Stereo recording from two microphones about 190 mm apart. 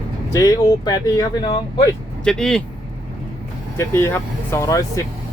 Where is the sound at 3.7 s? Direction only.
15° left (ahead or behind).